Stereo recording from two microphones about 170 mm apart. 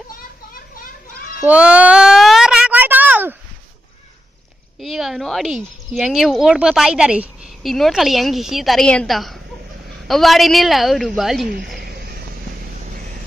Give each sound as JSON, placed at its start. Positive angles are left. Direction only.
{"t": 1.4, "sound": "child singing", "side_deg": -5}
{"t": 4.7, "sound": "speech", "side_deg": 0}
{"t": 11.8, "sound": "a sound", "side_deg": -65}